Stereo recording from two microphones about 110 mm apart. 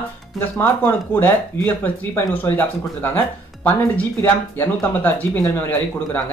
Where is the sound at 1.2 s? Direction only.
20° left (ahead or behind).